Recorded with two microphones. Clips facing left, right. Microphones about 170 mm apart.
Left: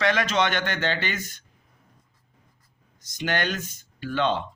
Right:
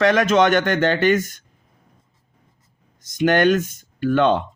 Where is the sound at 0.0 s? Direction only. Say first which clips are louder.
Right 8 dB; 45° right (ahead or behind).